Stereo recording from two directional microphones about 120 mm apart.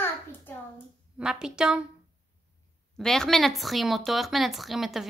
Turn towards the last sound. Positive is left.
turn(degrees=0)  # may be behind; listen again after turning